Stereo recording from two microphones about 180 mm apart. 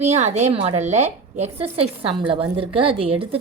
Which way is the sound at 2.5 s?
30° right (ahead or behind).